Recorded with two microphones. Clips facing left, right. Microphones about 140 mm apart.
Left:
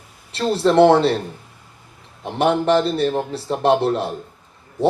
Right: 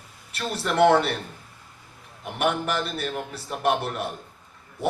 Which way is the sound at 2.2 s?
30° left (ahead or behind).